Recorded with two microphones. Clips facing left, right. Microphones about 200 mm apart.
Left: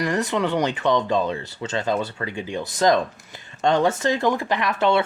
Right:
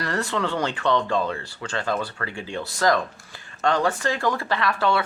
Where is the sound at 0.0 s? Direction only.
15° left (ahead or behind).